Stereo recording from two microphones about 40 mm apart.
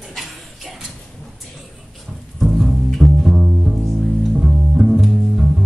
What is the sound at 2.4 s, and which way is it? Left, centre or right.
Music, centre.